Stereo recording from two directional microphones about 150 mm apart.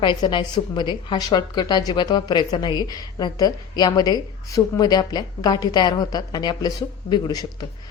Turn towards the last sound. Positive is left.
turn(degrees=25)  # may be behind; listen again after turning